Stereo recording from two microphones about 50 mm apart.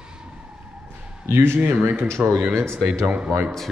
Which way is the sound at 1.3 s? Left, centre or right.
Right.